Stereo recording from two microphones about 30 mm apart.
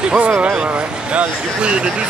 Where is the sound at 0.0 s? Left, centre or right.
Right.